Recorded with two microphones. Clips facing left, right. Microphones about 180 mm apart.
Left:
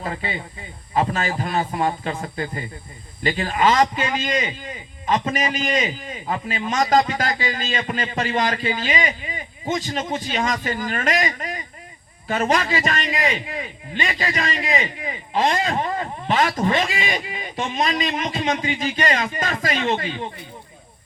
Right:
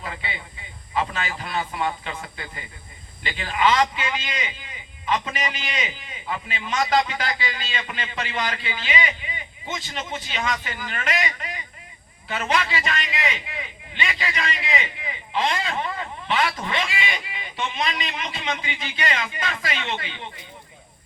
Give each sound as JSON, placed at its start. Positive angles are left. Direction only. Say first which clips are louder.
{"t": 0.0, "sound": "a man's voice", "louder": "left 6 dB", "side_deg": 40}